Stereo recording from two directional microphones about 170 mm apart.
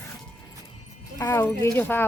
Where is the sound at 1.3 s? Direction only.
10° left (ahead or behind).